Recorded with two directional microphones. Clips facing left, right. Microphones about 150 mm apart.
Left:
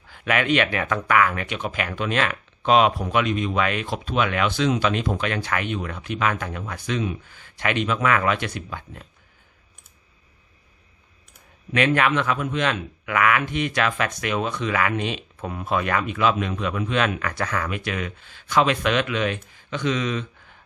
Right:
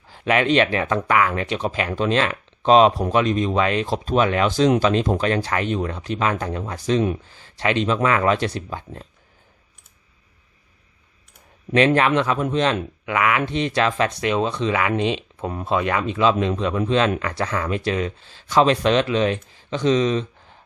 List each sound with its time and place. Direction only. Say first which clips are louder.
0.1 s speech: right 3 dB; 30° right (ahead or behind)
11.9 s speech: right 3 dB; 30° right (ahead or behind)
13.1 s speech: even; 20° right (ahead or behind)